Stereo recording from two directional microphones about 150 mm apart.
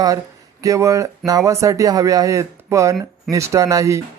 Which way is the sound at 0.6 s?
20° right (ahead or behind).